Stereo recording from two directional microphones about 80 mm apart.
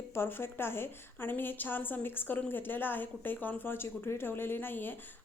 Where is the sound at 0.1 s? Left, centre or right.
Left.